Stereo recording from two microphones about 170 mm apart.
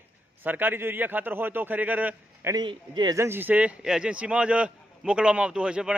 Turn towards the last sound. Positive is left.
turn(degrees=-5)  # may be behind; listen again after turning